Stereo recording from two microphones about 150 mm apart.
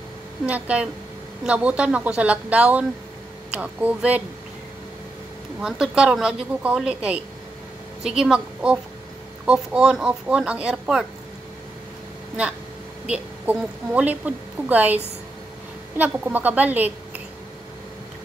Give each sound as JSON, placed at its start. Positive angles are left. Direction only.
{"t": 0.5, "sound": "a woman's voice", "side_deg": -10}
{"t": 5.6, "sound": "a woman's voice", "side_deg": -5}
{"t": 13.1, "sound": "a woman's voice", "side_deg": -10}
{"t": 16.0, "sound": "a woman's voice", "side_deg": -10}